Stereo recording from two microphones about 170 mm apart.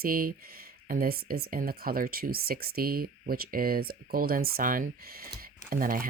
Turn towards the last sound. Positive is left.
turn(degrees=-55)  # may be behind; listen again after turning